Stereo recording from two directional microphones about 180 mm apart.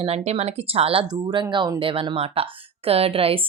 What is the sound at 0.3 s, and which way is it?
Speech, 35° right (ahead or behind).